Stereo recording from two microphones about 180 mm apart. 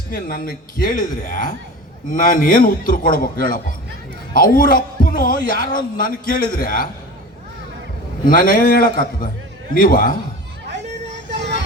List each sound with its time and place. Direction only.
0.3 s a man's voice: 55° left (ahead or behind)
8.2 s a man's voice: 50° left (ahead or behind)
11.3 s vehicle: 75° right (ahead or behind)